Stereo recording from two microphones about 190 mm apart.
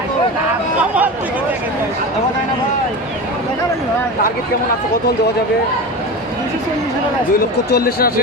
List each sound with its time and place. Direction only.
0.8 s speech: 5° right (ahead or behind)
7.7 s speech: 55° left (ahead or behind)